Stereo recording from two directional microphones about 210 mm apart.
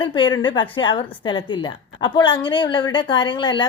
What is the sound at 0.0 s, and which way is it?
A woman's voice, 20° left (ahead or behind).